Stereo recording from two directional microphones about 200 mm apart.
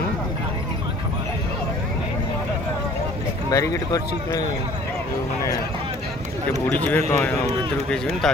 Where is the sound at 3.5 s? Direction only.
15° left (ahead or behind).